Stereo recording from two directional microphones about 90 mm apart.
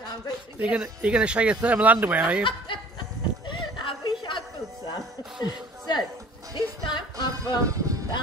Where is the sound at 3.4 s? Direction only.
65° left (ahead or behind).